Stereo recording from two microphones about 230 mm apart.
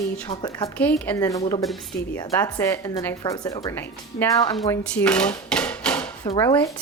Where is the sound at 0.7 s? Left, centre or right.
Centre.